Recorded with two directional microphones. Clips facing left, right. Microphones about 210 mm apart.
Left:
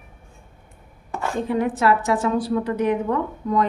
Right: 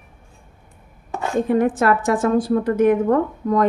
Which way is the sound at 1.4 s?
50° right (ahead or behind).